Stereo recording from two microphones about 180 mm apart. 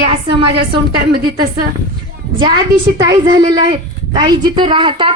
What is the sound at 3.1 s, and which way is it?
A woman's voice, 25° right (ahead or behind).